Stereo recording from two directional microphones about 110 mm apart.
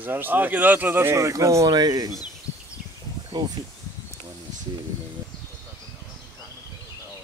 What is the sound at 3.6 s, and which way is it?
Speech, 45° right (ahead or behind).